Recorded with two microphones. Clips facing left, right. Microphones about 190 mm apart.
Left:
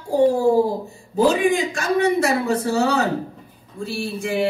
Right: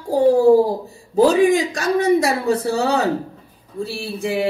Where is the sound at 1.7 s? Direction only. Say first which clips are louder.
Right 2 dB; 35° right (ahead or behind).